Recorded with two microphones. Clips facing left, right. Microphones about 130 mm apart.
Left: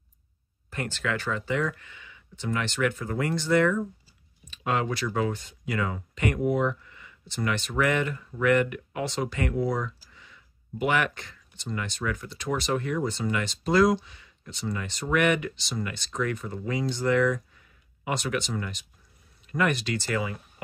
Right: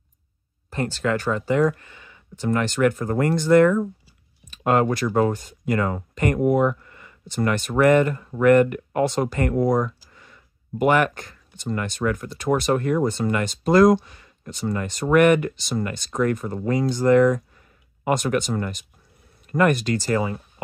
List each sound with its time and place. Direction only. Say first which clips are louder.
0.7 s speech: right 7 dB; 35° right (ahead or behind)